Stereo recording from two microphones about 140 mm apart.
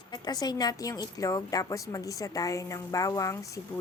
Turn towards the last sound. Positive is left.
turn(degrees=20)  # may be behind; listen again after turning